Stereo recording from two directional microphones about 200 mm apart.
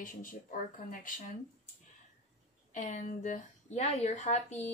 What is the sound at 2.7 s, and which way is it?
Speech, 40° left (ahead or behind).